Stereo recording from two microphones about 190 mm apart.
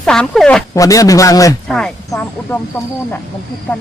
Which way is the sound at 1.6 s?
Centre (ahead or behind).